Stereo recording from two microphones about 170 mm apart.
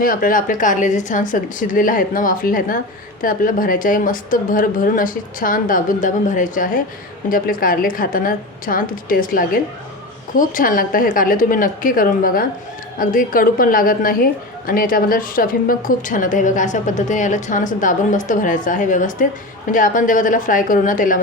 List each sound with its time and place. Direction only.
0.0 s a woman's voice: 55° left (ahead or behind)